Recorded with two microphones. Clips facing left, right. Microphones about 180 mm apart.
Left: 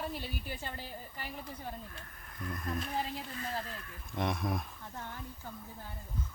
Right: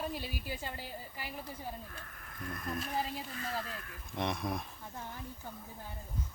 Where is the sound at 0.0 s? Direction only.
10° right (ahead or behind).